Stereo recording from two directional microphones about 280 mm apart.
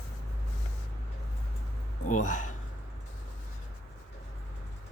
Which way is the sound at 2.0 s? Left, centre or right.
Left.